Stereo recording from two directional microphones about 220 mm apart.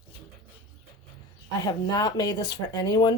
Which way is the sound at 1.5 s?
20° left (ahead or behind).